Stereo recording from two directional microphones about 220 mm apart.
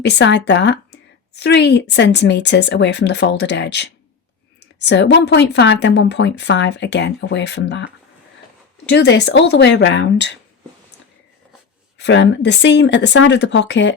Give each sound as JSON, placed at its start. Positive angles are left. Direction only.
{"t": 0.0, "sound": "speech", "side_deg": 50}
{"t": 8.9, "sound": "speech", "side_deg": 50}
{"t": 11.9, "sound": "speech", "side_deg": 50}